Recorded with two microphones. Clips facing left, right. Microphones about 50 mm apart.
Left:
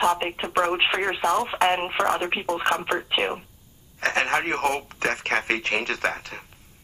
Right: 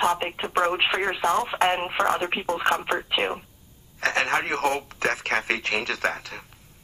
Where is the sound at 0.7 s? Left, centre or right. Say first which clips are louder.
Left 1 dB; left.